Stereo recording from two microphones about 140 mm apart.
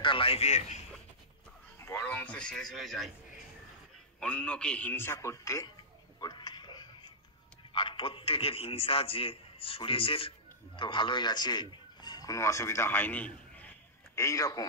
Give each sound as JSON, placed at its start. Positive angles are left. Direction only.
{"t": 0.0, "sound": "a man's voice", "side_deg": 40}
{"t": 1.9, "sound": "a man's voice", "side_deg": 15}
{"t": 4.2, "sound": "a man's voice", "side_deg": 10}
{"t": 6.2, "sound": "whispering", "side_deg": 30}
{"t": 7.7, "sound": "a man's voice", "side_deg": 40}